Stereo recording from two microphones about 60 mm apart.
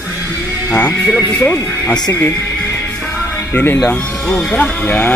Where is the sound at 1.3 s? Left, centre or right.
Left.